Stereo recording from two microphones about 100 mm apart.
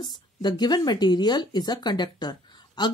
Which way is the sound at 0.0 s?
45° left (ahead or behind).